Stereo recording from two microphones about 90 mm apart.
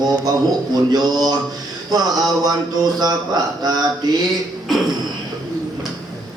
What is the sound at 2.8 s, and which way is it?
A man's voice, 50° right (ahead or behind).